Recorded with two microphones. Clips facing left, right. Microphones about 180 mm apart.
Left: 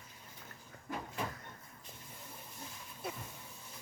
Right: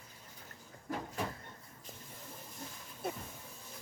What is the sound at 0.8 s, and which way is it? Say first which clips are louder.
Vehicle: right 2 dB; 40° right (ahead or behind).